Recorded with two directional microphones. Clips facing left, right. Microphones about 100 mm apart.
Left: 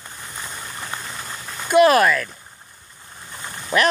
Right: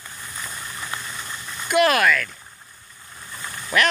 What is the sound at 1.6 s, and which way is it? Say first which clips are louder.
Speech: left 4 dB; 30° left (ahead or behind).